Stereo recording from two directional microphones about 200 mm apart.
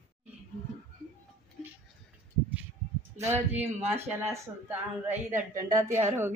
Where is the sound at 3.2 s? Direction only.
10° right (ahead or behind).